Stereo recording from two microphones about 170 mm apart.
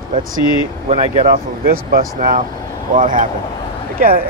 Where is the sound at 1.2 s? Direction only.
60° right (ahead or behind).